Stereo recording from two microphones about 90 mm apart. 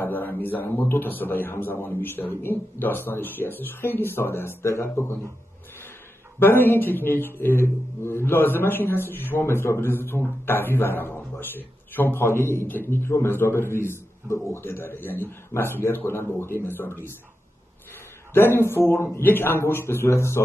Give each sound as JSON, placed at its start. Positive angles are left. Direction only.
{"t": 0.0, "sound": "a man's voice", "side_deg": 20}
{"t": 6.4, "sound": "a man's voice", "side_deg": 25}
{"t": 18.3, "sound": "a man's voice", "side_deg": 25}